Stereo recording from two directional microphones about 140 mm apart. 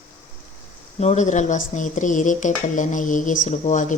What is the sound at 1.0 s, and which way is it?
Speech, 55° left (ahead or behind).